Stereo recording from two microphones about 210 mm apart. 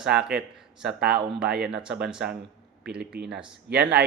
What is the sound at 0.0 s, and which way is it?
Speech, 5° right (ahead or behind).